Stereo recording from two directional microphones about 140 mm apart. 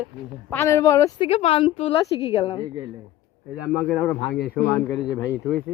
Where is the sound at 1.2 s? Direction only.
45° left (ahead or behind).